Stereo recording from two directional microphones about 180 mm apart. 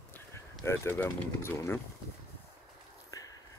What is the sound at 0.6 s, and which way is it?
Speech, 15° left (ahead or behind).